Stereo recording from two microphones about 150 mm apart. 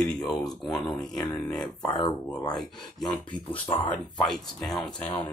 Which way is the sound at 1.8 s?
30° left (ahead or behind).